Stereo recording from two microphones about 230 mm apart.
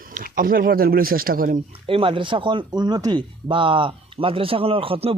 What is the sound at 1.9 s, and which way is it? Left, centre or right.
Speech, right.